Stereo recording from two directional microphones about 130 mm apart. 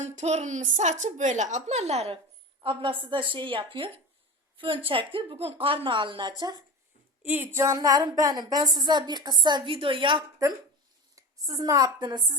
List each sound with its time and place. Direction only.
0.0 s a woman's voice: 60° right (ahead or behind)
2.6 s a woman's voice: 40° right (ahead or behind)
7.3 s a woman's voice: 20° right (ahead or behind); by 10.2 s 40° right (ahead or behind)
11.1 s a woman's voice: 30° right (ahead or behind)